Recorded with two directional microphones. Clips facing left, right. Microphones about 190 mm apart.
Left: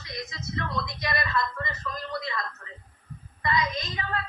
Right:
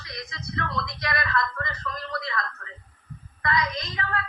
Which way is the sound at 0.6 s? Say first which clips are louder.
Right 1 dB; centre (ahead or behind).